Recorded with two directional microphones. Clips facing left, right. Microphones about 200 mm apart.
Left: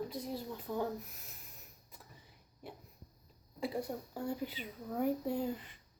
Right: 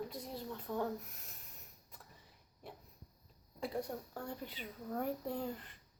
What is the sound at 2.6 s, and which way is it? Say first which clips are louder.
Dog: left 3 dB; 5° left (ahead or behind).